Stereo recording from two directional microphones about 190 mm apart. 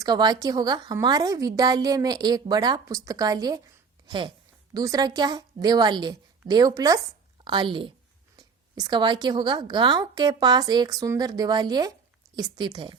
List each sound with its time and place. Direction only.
0.0 s a woman's voice: 20° right (ahead or behind)